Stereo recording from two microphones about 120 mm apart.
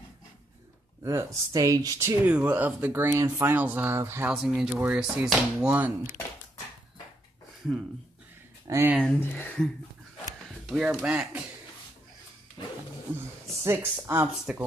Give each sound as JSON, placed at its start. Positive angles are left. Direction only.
{"t": 1.0, "sound": "speech", "side_deg": -25}
{"t": 2.2, "sound": "speech", "side_deg": -15}
{"t": 4.3, "sound": "speech", "side_deg": -5}
{"t": 8.6, "sound": "speech", "side_deg": -25}
{"t": 9.0, "sound": "speech", "side_deg": 15}
{"t": 10.7, "sound": "speech", "side_deg": -5}
{"t": 13.7, "sound": "speech", "side_deg": -20}